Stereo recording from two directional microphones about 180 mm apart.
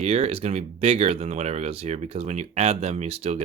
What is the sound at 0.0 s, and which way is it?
Speech, 35° right (ahead or behind).